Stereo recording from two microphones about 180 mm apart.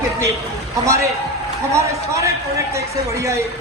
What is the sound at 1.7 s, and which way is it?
Speech, 15° right (ahead or behind).